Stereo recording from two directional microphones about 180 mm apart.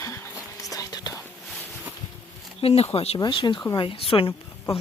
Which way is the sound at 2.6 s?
35° left (ahead or behind).